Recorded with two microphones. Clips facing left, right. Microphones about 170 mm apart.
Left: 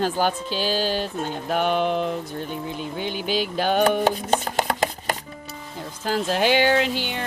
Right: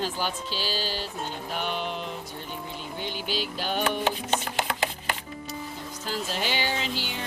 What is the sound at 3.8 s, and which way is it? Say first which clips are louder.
Chopping: left 7 dB; 40° left (ahead or behind).